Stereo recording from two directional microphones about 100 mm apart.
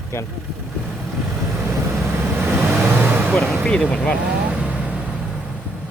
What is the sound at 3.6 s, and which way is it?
Speech, 10° left (ahead or behind).